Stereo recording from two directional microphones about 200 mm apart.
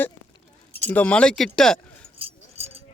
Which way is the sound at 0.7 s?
10° left (ahead or behind).